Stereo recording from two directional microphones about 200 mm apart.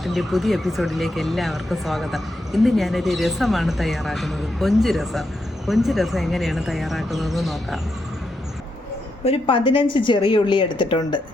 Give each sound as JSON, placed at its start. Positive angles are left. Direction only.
{"t": 0.0, "sound": "speech", "side_deg": 0}
{"t": 9.2, "sound": "a woman's voice", "side_deg": 30}